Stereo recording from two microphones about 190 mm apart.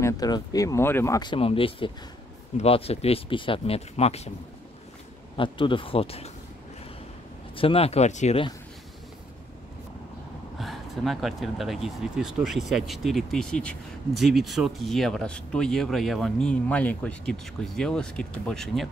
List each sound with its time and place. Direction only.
0.0 s speech: 20° left (ahead or behind)
5.4 s speech: 25° left (ahead or behind)
7.5 s speech: 30° left (ahead or behind)
10.6 s speech: centre (ahead or behind)